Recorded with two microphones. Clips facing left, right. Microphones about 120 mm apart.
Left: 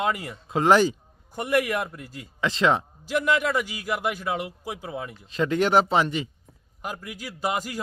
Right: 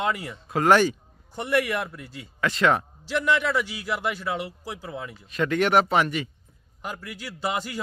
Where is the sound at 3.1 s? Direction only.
45° left (ahead or behind).